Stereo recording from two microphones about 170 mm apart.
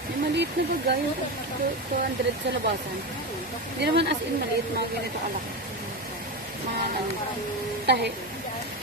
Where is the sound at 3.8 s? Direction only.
85° right.